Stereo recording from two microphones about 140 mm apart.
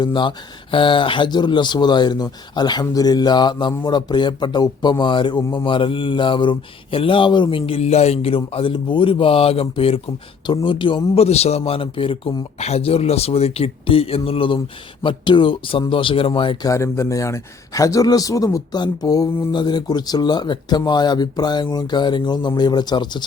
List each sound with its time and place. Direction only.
0.0 s a man's voice: 35° left (ahead or behind)
16.6 s speech: 20° left (ahead or behind)